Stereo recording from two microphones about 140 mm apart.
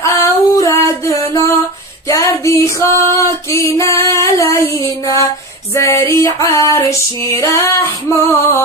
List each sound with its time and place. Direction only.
0.0 s female singing: 20° left (ahead or behind)